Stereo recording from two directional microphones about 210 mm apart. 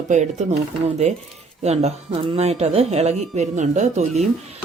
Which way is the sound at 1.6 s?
30° right (ahead or behind).